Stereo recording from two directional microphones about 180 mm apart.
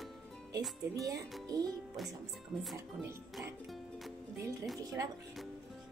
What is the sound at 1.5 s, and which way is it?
Music, 20° right (ahead or behind).